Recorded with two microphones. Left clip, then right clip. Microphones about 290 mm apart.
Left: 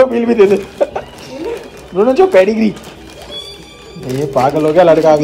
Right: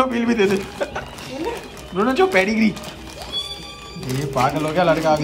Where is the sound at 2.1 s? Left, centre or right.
Centre.